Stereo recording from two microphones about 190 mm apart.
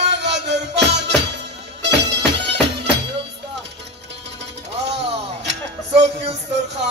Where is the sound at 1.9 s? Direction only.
65° right (ahead or behind).